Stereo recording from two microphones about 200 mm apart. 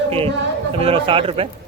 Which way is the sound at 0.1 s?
30° right (ahead or behind).